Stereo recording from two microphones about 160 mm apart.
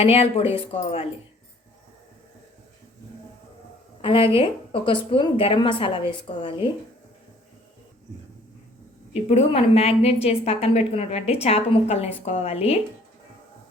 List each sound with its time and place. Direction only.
0.0 s a woman's voice: 40° left (ahead or behind)
4.0 s a woman's voice: 35° left (ahead or behind)
9.3 s a woman's voice: 40° left (ahead or behind)